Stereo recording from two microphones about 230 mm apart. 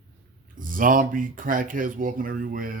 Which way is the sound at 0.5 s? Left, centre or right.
Right.